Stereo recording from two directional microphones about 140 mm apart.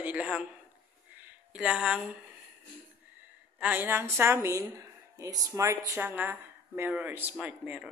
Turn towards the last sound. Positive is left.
turn(degrees=-10)  # may be behind; listen again after turning